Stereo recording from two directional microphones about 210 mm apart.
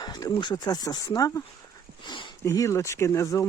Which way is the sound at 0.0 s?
20° left (ahead or behind).